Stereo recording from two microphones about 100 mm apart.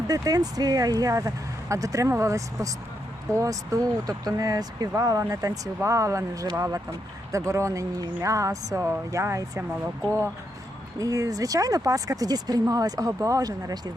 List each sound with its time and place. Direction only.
0.1 s speech: 40° right (ahead or behind)
10.9 s speech: 35° right (ahead or behind)